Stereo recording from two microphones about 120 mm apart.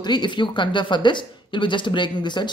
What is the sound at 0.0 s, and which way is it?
Speech, 40° left (ahead or behind).